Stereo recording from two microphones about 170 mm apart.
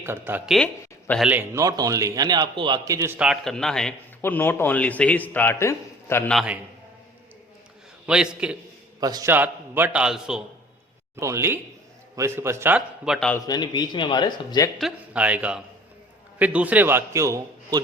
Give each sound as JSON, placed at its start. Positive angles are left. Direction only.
{"t": 0.0, "sound": "a man's voice", "side_deg": -10}
{"t": 0.5, "sound": "speech", "side_deg": 5}
{"t": 1.2, "sound": "a man's voice", "side_deg": -10}
{"t": 3.2, "sound": "a man's voice", "side_deg": 0}
{"t": 6.3, "sound": "a man's voice", "side_deg": -5}
{"t": 8.0, "sound": "a man's voice", "side_deg": -5}
{"t": 9.0, "sound": "a man's voice", "side_deg": -25}
{"t": 9.3, "sound": "a man's voice", "side_deg": -10}
{"t": 11.2, "sound": "a man's voice", "side_deg": -15}
{"t": 13.1, "sound": "a man's voice", "side_deg": 5}
{"t": 13.5, "sound": "speech", "side_deg": 25}
{"t": 14.8, "sound": "a man's voice", "side_deg": -5}